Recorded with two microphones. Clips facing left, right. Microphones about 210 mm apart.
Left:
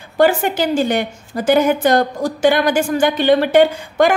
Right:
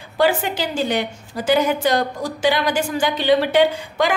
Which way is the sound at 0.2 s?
50° left (ahead or behind).